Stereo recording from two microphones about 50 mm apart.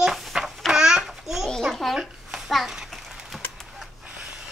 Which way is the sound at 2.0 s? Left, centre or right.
Centre.